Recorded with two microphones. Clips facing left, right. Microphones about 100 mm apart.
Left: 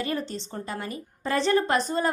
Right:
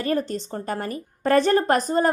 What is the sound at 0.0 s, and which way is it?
A woman's voice, 45° right (ahead or behind).